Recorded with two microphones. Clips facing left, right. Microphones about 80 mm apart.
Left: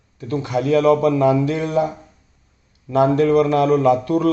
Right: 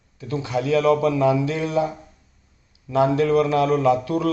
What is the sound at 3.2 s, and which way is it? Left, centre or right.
A man's voice, centre.